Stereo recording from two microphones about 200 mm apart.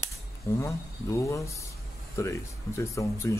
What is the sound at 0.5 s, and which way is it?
A man's voice, 15° left (ahead or behind).